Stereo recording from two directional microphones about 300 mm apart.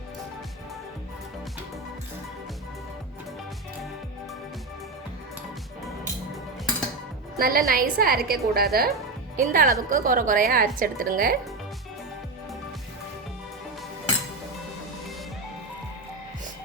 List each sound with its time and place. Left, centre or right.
7.3 s a woman's voice: right